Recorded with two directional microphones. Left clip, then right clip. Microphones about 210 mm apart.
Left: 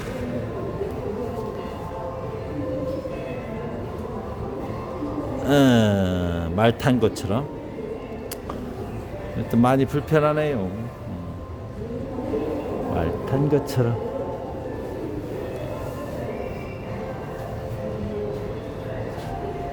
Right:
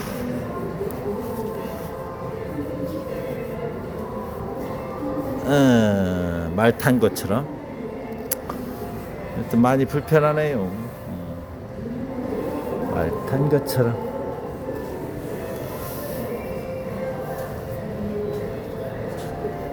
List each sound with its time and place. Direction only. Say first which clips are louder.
5.5 s a sound: even; 15° left (ahead or behind)
9.5 s speech: right 1 dB; 15° left (ahead or behind)
13.0 s speech: even; 15° left (ahead or behind)